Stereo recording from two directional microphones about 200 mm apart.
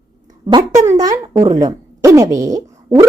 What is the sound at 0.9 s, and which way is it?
Speech, 15° right (ahead or behind).